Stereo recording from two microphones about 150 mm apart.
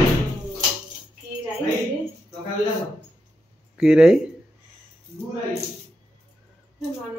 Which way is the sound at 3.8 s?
5° right (ahead or behind).